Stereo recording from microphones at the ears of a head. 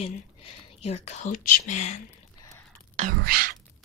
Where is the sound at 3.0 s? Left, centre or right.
Right.